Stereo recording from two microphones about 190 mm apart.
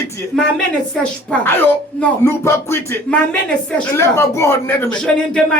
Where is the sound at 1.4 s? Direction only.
10° left (ahead or behind).